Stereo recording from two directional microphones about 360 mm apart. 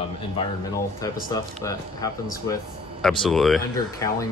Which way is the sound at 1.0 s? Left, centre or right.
Centre.